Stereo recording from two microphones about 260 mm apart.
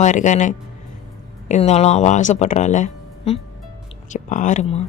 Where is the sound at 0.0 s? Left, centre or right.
Left.